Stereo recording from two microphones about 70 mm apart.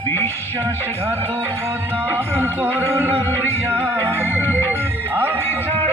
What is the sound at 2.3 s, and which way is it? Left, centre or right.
Music, right.